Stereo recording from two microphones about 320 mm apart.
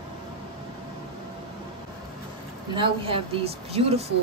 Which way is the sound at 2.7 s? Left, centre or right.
Centre.